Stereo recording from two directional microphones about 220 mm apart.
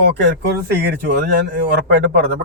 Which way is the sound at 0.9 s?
50° right (ahead or behind).